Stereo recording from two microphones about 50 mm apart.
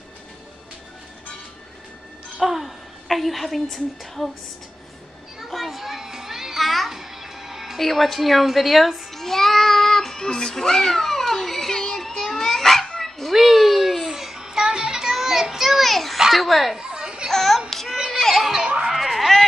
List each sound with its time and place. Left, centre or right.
2.3 s a woman's voice: centre
5.5 s children playing: centre
7.8 s child singing: centre
13.3 s music: centre
16.2 s a child's voice: centre
16.7 s children playing: centre
17.3 s child singing: centre
17.9 s children playing: centre
18.3 s a sound: centre
18.9 s baby cry: centre